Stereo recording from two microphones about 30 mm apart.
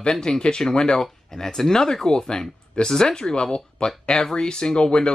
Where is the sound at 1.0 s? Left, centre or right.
Centre.